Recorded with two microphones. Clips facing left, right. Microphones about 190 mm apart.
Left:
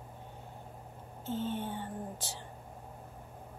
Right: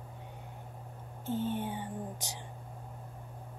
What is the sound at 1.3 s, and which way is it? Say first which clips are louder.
Speech: right 2 dB; 15° right (ahead or behind).